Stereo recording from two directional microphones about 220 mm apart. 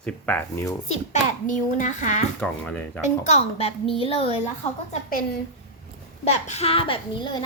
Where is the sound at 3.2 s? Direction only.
30° left (ahead or behind).